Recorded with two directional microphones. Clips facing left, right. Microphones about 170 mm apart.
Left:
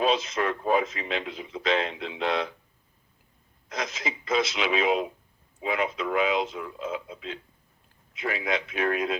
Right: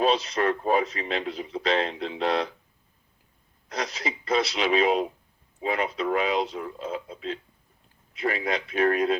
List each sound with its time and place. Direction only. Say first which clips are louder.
0.0 s speech: right 2 dB; 35° right (ahead or behind)
3.7 s speech: right 1 dB; 35° right (ahead or behind)